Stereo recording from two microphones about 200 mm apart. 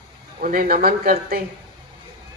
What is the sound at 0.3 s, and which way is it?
Speech, 45° right (ahead or behind).